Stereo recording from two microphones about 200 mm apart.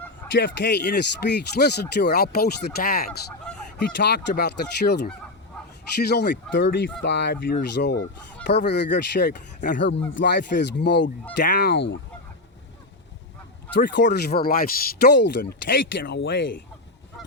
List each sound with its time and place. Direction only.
0.3 s speech: 60° left (ahead or behind)
3.1 s speech: 5° left (ahead or behind)
3.9 s speech: 55° left (ahead or behind)
13.7 s speech: 60° left (ahead or behind)